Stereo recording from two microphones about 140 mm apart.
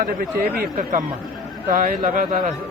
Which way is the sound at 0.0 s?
90° right.